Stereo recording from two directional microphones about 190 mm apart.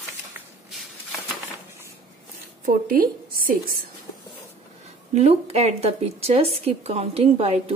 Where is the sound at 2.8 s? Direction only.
50° right (ahead or behind).